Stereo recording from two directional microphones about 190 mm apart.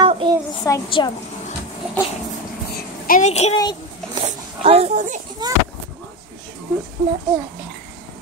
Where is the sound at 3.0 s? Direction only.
40° left (ahead or behind).